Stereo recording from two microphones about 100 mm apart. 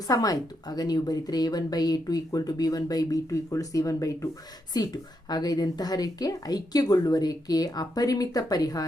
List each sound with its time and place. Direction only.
0.1 s a woman's voice: 40° left (ahead or behind)